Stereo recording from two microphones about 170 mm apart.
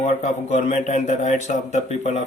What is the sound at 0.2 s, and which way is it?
Speech, 45° left (ahead or behind).